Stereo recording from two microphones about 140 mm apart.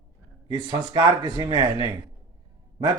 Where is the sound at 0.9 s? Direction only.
30° right (ahead or behind).